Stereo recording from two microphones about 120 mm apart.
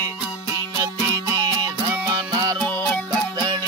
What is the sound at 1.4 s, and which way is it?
Music, 35° right (ahead or behind).